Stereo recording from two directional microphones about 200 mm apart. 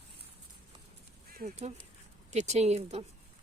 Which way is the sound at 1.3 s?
40° right (ahead or behind).